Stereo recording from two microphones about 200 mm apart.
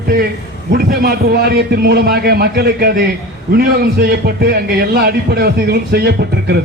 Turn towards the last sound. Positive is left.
turn(degrees=-55)  # may be behind; listen again after turning